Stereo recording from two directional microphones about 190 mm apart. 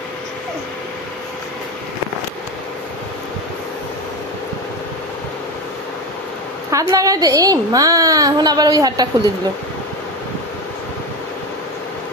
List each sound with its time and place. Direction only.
6.7 s a woman's voice: 15° right (ahead or behind)